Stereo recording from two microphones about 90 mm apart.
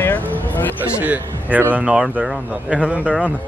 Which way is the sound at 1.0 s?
20° right (ahead or behind).